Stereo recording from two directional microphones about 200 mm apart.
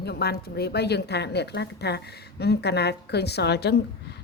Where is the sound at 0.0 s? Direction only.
55° left (ahead or behind).